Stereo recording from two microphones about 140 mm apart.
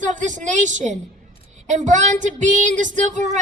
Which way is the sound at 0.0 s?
60° right (ahead or behind).